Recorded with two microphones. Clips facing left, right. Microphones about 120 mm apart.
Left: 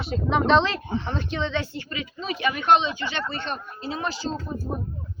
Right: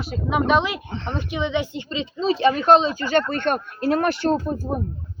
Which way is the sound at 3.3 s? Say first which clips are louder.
Right 9 dB; 55° right (ahead or behind).